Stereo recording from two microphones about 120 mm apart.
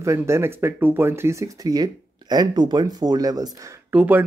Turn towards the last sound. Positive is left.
turn(degrees=-15)  # may be behind; listen again after turning